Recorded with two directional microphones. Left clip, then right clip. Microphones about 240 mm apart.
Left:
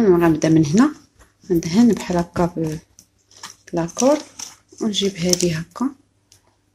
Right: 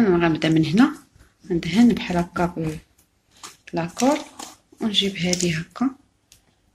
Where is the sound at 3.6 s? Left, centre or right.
Left.